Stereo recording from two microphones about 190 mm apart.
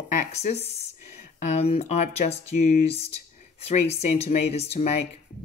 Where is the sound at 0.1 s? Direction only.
40° left (ahead or behind).